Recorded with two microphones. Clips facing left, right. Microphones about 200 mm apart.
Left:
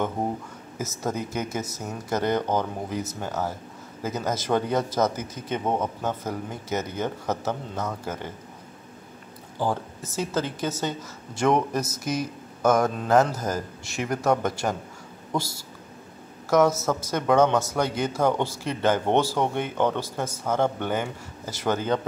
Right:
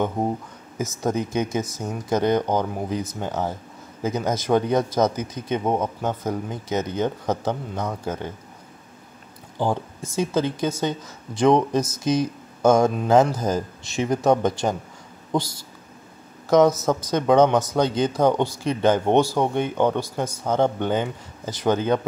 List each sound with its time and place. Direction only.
0.7 s a man's voice: 15° right (ahead or behind)
9.6 s a man's voice: 15° right (ahead or behind)